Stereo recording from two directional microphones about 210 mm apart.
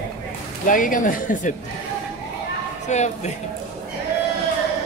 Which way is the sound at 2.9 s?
35° left (ahead or behind).